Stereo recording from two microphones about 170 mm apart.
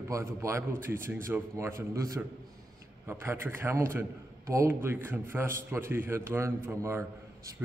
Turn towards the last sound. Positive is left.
turn(degrees=-15)  # may be behind; listen again after turning